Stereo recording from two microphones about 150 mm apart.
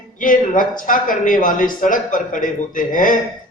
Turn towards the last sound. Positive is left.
turn(degrees=65)  # may be behind; listen again after turning